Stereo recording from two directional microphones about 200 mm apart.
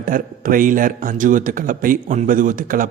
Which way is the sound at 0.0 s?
45° right (ahead or behind).